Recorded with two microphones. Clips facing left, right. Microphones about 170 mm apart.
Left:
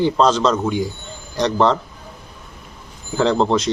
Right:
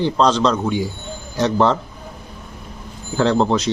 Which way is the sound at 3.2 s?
Centre (ahead or behind).